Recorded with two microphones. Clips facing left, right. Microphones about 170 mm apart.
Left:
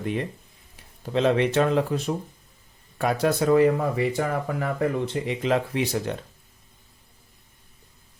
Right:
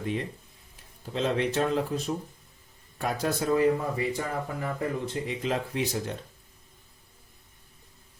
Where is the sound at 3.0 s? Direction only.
75° left (ahead or behind).